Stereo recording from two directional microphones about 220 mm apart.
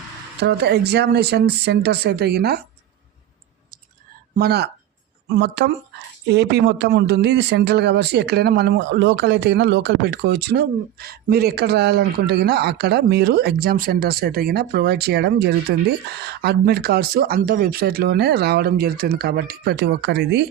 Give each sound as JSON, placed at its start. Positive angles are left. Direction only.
{"t": 0.3, "sound": "a man's voice", "side_deg": -50}
{"t": 4.4, "sound": "a man's voice", "side_deg": -45}